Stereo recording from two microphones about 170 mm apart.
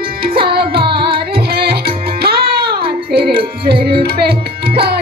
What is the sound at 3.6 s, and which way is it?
Tabla, 70° right (ahead or behind).